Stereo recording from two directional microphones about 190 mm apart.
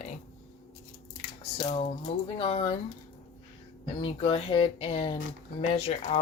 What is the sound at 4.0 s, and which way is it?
Speech, 30° left (ahead or behind).